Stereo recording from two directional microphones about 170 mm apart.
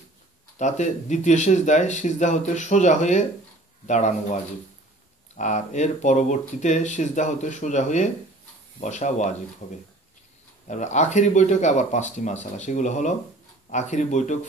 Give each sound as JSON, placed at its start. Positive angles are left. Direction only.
{"t": 0.6, "sound": "speech", "side_deg": 45}